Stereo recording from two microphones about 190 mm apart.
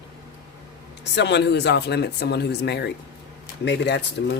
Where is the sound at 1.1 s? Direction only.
65° left (ahead or behind).